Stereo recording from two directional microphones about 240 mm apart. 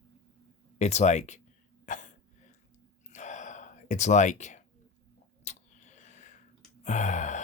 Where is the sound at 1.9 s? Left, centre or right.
Left.